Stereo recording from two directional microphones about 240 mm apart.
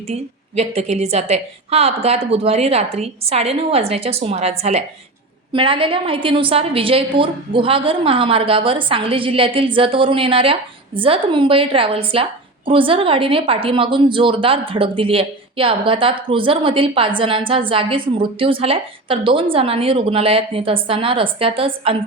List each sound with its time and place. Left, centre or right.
0.1 s a woman's voice: right